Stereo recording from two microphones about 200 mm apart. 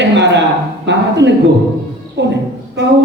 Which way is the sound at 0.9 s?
60° right (ahead or behind).